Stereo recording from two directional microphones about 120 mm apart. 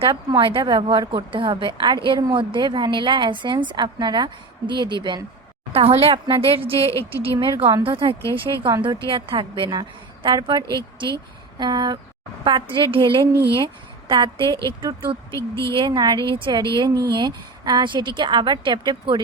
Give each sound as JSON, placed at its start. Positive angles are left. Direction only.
{"t": 0.0, "sound": "a woman's voice", "side_deg": -45}
{"t": 5.7, "sound": "a woman's voice", "side_deg": -55}
{"t": 15.3, "sound": "speech", "side_deg": 25}
{"t": 15.7, "sound": "a woman's voice", "side_deg": -40}